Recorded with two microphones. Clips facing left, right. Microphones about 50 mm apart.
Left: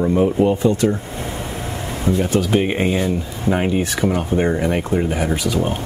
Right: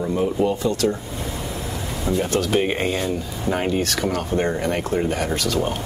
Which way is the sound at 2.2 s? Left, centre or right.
Centre.